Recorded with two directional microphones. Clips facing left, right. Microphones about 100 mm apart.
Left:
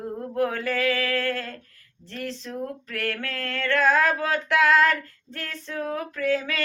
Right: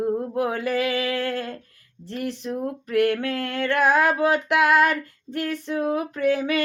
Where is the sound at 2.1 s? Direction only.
15° right (ahead or behind).